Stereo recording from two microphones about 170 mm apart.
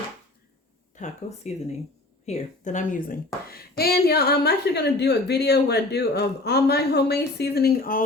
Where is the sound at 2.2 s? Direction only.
45° left (ahead or behind).